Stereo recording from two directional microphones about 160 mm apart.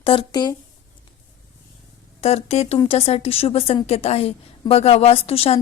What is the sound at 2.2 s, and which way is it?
A woman's voice, 40° left (ahead or behind).